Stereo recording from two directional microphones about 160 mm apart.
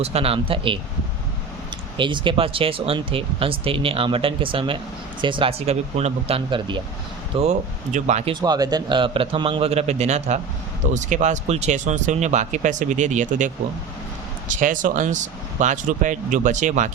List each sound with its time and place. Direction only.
0.0 s speech: 40° right (ahead or behind)
2.0 s speech: 30° right (ahead or behind); by 8.3 s 45° right (ahead or behind)
8.3 s speech: 25° right (ahead or behind); by 16.9 s 50° right (ahead or behind)